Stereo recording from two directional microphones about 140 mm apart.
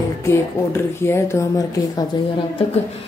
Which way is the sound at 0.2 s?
20° left (ahead or behind).